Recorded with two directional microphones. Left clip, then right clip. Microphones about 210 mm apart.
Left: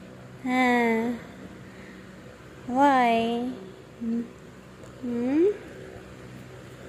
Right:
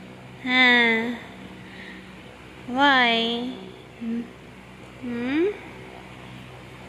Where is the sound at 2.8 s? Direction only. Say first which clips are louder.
Right 2 dB; 15° left (ahead or behind).